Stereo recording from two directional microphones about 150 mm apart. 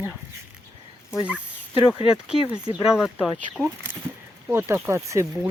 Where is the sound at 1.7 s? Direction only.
35° left (ahead or behind).